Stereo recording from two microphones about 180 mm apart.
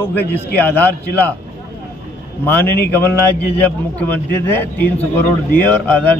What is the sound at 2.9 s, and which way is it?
A man's voice, 10° left (ahead or behind).